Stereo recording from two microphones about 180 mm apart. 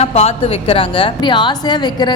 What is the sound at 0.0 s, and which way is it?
A woman's voice, 35° left (ahead or behind).